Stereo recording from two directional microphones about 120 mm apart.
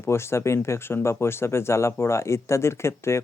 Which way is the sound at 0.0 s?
20° left (ahead or behind).